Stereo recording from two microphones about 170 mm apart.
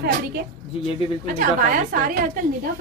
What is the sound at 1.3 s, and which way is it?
Speech, 55° right (ahead or behind).